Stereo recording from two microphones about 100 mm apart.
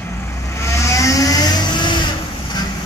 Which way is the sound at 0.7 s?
30° left (ahead or behind).